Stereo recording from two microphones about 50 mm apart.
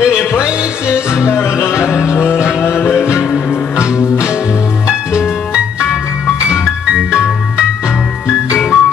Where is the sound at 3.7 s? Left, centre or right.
Centre.